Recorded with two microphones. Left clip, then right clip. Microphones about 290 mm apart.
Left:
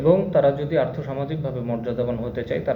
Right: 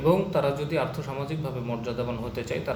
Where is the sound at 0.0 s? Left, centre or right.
Centre.